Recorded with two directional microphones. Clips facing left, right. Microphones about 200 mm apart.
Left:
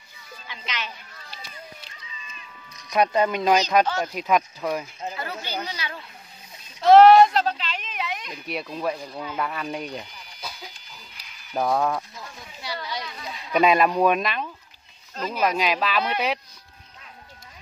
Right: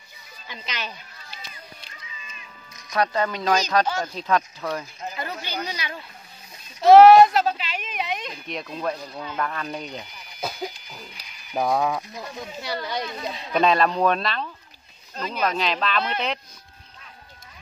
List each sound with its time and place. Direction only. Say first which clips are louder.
0.5 s a woman's voice: right 1 dB; 40° right (ahead or behind)
2.9 s speech: left 3 dB; 20° left (ahead or behind)
5.1 s a sound: right 1 dB; 15° right (ahead or behind)
8.5 s speech: left 1 dB; 5° left (ahead or behind)
10.4 s music: right 10 dB; 55° right (ahead or behind)
11.7 s speech: even; 10° right (ahead or behind)
12.5 s speech: right 3 dB; 50° right (ahead or behind)
13.0 s speech: right 6 dB; 25° right (ahead or behind)
13.5 s speech: left 1 dB; 10° left (ahead or behind)